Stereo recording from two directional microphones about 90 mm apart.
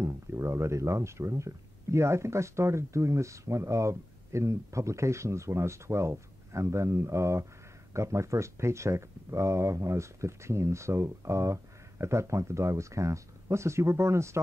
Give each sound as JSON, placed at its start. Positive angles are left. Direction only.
{"t": 0.0, "sound": "speech", "side_deg": -30}